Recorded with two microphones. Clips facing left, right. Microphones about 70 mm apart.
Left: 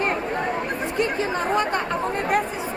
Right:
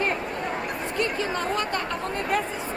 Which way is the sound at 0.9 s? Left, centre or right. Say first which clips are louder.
Left 3 dB; left.